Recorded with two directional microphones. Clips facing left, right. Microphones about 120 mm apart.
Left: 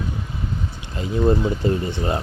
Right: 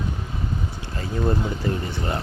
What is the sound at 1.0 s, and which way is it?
Speech, 25° left (ahead or behind).